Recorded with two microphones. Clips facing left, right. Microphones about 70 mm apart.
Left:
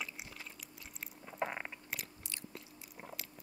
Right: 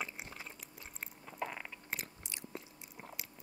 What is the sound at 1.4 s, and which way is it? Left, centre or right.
Biting, left.